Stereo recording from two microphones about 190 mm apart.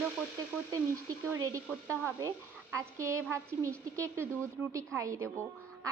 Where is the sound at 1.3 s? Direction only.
15° right (ahead or behind).